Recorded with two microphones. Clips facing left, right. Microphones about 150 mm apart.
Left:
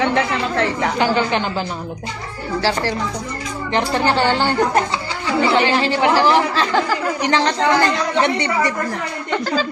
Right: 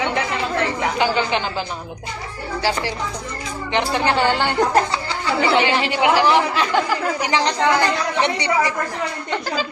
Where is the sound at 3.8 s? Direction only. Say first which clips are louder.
Left 2 dB; 20° right (ahead or behind).